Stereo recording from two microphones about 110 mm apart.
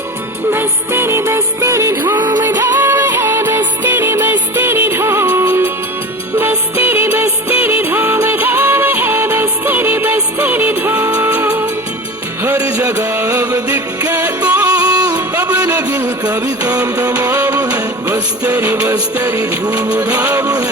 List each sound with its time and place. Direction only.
0.5 s music: 20° right (ahead or behind)
2.1 s music: 40° right (ahead or behind)
2.6 s music: 20° right (ahead or behind)
14.9 s music: 40° right (ahead or behind)
15.7 s music: 15° right (ahead or behind)
16.8 s music: 35° right (ahead or behind)
18.1 s music: 15° right (ahead or behind)
18.9 s music: 30° right (ahead or behind)